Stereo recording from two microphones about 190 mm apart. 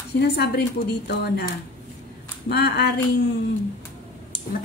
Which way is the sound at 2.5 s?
55° left (ahead or behind).